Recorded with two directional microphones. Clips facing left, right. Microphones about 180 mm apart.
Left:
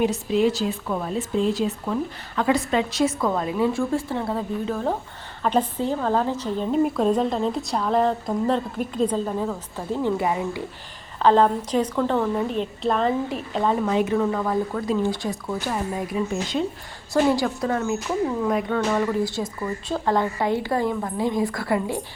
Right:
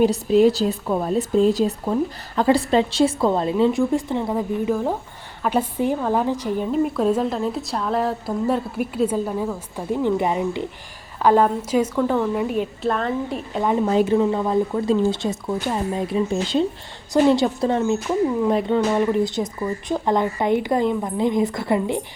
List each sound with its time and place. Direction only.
0.0 s speech: 40° right (ahead or behind); by 6.7 s 10° right (ahead or behind)
6.7 s speech: centre (ahead or behind); by 10.6 s 20° right (ahead or behind)
11.2 s speech: 10° right (ahead or behind)
13.8 s a woman's voice: 30° right (ahead or behind)